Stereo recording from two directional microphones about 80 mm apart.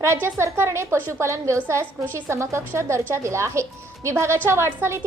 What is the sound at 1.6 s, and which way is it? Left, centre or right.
A woman's voice, right.